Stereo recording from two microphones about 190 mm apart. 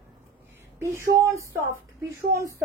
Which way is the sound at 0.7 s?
15° right (ahead or behind).